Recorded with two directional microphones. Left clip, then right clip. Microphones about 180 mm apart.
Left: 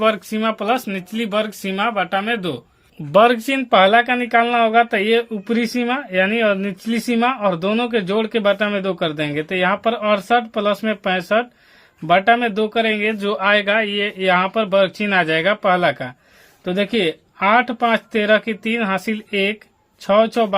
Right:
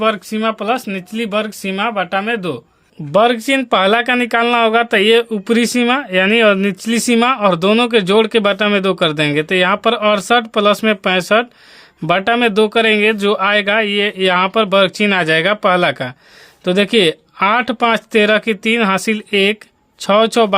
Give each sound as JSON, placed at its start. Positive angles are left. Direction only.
{"t": 0.0, "sound": "speech", "side_deg": -15}